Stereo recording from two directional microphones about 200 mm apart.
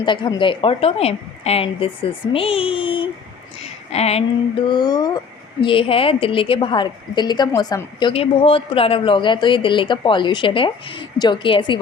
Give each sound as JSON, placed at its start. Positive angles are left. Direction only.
{"t": 0.0, "sound": "a woman's voice", "side_deg": 25}